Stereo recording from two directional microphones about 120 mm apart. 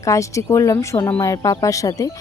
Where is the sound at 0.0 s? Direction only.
25° left (ahead or behind).